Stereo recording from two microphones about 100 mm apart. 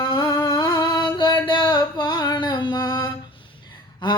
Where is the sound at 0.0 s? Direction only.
55° left (ahead or behind).